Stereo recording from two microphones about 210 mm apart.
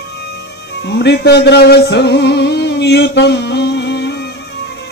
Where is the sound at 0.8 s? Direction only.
55° left (ahead or behind).